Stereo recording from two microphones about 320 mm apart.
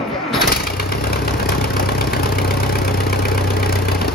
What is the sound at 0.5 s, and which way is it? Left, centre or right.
Engine, left.